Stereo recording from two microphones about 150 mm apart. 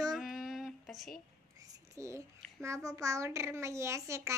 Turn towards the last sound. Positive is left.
turn(degrees=-20)  # may be behind; listen again after turning